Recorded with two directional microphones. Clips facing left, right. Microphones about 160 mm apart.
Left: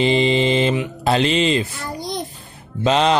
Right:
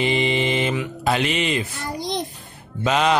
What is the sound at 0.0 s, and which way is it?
Mantra, 30° left (ahead or behind).